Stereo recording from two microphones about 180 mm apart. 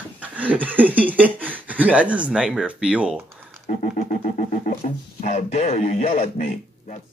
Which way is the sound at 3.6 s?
45° left (ahead or behind).